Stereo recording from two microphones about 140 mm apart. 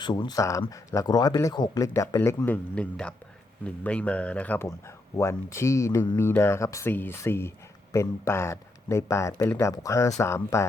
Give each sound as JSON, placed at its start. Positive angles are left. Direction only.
{"t": 0.0, "sound": "speech", "side_deg": 30}